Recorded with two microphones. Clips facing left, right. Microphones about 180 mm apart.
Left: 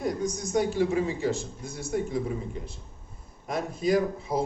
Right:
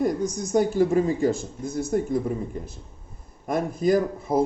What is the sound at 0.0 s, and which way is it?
Speech, 50° right (ahead or behind).